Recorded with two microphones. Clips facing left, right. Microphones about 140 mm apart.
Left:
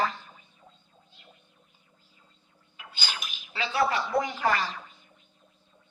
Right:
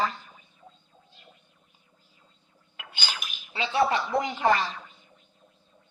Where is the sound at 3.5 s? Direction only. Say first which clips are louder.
Right 2 dB; 20° right (ahead or behind).